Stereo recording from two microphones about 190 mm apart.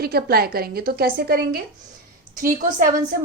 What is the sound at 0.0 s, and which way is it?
A woman's voice, 55° right (ahead or behind).